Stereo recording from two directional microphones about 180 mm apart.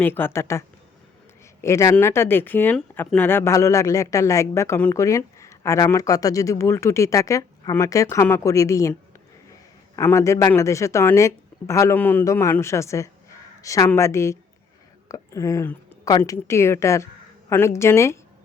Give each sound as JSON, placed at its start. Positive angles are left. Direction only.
{"t": 0.0, "sound": "speech", "side_deg": 10}
{"t": 1.6, "sound": "speech", "side_deg": 15}